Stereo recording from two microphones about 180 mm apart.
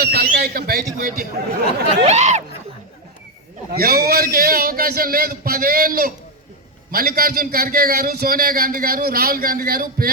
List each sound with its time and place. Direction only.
0.0 s a man's voice: 60° right (ahead or behind)
2.0 s speech: 40° right (ahead or behind)
3.7 s a man's voice: 55° right (ahead or behind)